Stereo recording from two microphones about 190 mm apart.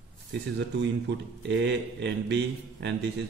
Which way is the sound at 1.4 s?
65° right (ahead or behind).